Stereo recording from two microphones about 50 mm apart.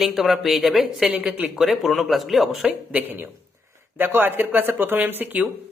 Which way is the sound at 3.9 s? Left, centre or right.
Right.